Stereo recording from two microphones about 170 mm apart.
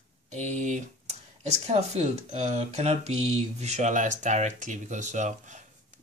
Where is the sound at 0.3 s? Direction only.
45° right (ahead or behind).